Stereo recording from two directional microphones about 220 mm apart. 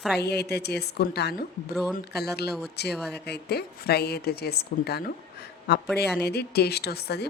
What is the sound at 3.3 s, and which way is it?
A woman's voice, 45° left (ahead or behind).